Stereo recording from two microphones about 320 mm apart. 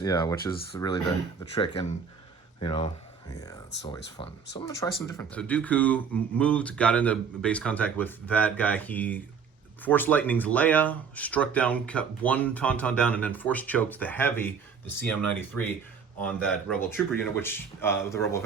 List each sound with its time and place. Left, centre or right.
0.0 s speech: centre